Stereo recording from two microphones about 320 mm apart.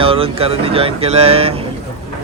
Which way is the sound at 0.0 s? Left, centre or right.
Centre.